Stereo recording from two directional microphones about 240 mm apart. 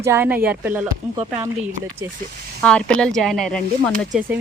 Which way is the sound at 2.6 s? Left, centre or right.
Centre.